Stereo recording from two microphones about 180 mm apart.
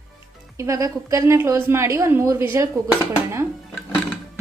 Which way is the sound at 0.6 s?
15° right (ahead or behind).